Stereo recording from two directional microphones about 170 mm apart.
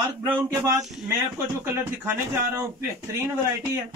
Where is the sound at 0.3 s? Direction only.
15° right (ahead or behind).